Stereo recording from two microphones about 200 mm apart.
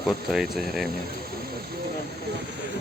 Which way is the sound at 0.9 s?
50° right (ahead or behind).